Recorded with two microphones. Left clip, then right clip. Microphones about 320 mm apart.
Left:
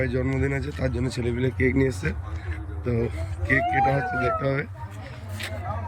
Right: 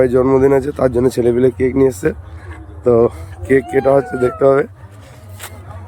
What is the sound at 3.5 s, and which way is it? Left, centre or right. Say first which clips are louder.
Speech: right 9 dB; centre.